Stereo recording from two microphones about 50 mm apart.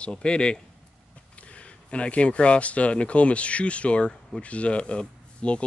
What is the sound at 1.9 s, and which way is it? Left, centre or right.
Speech, left.